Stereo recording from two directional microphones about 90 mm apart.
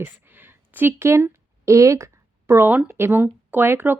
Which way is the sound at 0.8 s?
25° right (ahead or behind).